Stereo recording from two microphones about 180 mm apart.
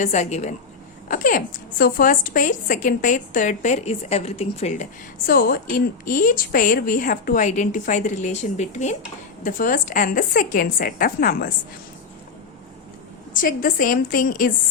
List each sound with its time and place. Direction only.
0.0 s a woman's voice: 40° left (ahead or behind)
13.3 s a woman's voice: 50° left (ahead or behind)